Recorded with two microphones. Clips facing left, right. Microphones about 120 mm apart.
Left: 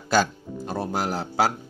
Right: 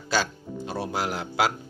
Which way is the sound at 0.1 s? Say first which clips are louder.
Left 5 dB; 45° left (ahead or behind).